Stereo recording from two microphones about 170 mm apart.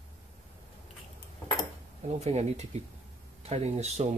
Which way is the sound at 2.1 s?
40° right (ahead or behind).